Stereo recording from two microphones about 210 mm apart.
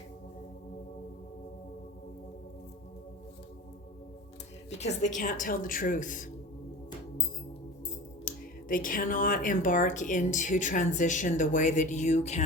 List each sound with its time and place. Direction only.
4.8 s speech: 35° left (ahead or behind)
8.2 s speech: 40° left (ahead or behind)